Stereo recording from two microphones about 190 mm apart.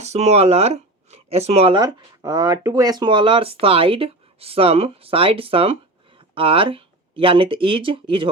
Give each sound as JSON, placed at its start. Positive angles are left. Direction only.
{"t": 0.0, "sound": "speech", "side_deg": -35}